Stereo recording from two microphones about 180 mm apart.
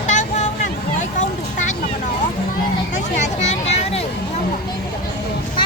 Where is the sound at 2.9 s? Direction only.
40° left (ahead or behind).